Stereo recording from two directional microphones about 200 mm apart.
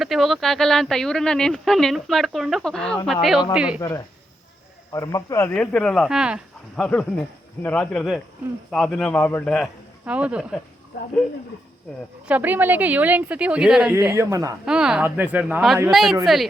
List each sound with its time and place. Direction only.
0.0 s speech: centre (ahead or behind)
3.8 s speech: 15° left (ahead or behind)
10.1 s speech: 5° right (ahead or behind)
12.3 s speech: 10° right (ahead or behind)
14.6 s speech: 5° right (ahead or behind)